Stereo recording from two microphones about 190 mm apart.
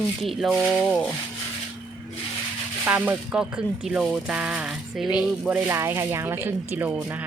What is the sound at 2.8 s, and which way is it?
Speech, 10° right (ahead or behind).